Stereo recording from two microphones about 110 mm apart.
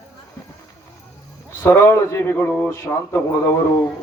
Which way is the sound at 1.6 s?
25° left (ahead or behind).